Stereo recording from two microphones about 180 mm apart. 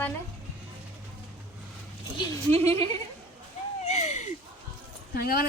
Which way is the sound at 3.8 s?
40° left (ahead or behind).